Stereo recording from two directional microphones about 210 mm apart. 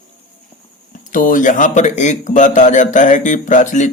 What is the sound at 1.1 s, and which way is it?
A man's voice, 40° left (ahead or behind).